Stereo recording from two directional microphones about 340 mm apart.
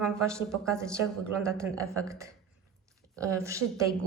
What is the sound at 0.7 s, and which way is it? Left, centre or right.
Speech, centre.